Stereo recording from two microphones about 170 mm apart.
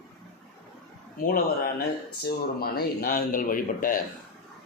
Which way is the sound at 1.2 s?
55° left (ahead or behind).